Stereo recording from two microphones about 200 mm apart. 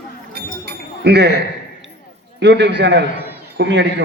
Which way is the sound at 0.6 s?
55° right (ahead or behind).